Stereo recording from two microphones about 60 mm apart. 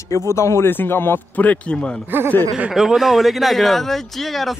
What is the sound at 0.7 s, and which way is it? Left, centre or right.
Speech, left.